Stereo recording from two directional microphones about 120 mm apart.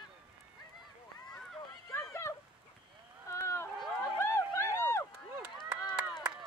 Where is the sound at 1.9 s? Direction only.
25° left (ahead or behind).